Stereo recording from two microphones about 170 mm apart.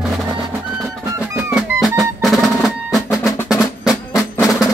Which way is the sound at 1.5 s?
Centre (ahead or behind).